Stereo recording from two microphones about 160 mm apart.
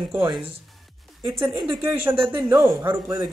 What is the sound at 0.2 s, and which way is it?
A man's voice, 30° right (ahead or behind).